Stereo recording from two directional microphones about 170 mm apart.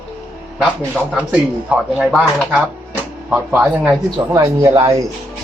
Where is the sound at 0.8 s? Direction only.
10° right (ahead or behind).